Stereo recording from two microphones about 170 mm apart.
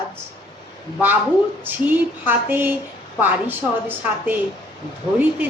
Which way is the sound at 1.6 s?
10° right (ahead or behind).